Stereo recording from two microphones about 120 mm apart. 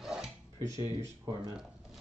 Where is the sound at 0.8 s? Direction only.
30° right (ahead or behind).